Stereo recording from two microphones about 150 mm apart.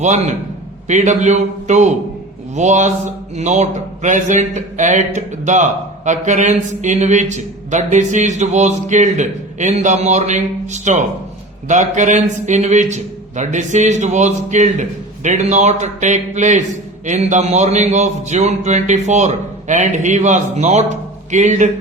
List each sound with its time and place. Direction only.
0.9 s speech: 50° right (ahead or behind)